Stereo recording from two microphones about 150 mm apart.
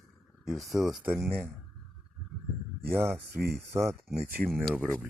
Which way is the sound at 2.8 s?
15° right (ahead or behind).